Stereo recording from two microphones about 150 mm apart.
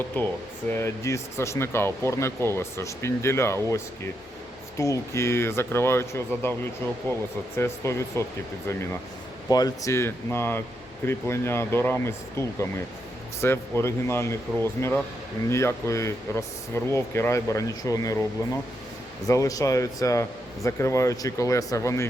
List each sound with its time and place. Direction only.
0.1 s speech: 10° left (ahead or behind)
4.8 s speech: 20° left (ahead or behind)
7.6 s speech: 20° left (ahead or behind)
9.5 s speech: 25° left (ahead or behind)
19.3 s speech: 20° left (ahead or behind)